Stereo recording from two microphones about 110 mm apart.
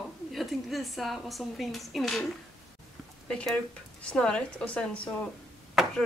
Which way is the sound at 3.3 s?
10° left (ahead or behind).